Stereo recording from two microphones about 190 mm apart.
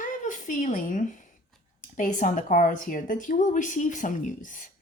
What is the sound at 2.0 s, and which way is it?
A woman's voice, 45° left (ahead or behind).